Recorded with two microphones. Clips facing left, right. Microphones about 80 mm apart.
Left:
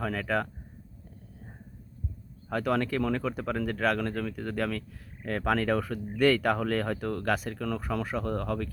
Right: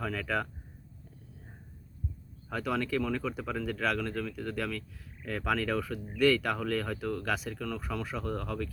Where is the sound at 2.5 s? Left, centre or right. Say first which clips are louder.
Left 5 dB; centre.